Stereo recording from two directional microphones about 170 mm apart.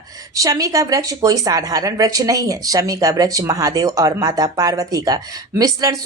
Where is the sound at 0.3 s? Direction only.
20° right (ahead or behind).